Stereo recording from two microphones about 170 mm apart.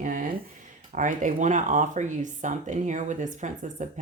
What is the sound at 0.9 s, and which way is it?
Speech, 50° right (ahead or behind).